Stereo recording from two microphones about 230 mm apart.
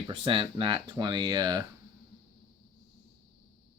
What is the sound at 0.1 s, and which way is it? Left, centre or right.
Speech, right.